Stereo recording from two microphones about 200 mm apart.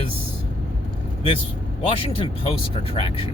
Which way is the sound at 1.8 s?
25° left (ahead or behind).